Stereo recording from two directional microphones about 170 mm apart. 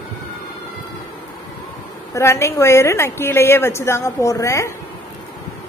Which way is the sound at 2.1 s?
15° left (ahead or behind).